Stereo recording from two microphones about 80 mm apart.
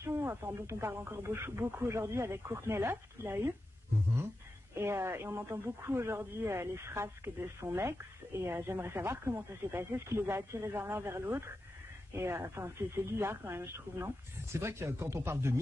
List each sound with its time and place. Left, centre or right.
0.0 s speech: right
4.7 s speech: right